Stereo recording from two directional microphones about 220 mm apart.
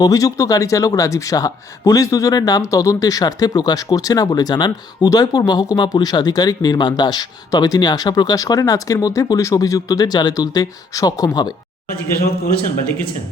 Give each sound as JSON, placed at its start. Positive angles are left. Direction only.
{"t": 0.0, "sound": "a man's voice", "side_deg": 15}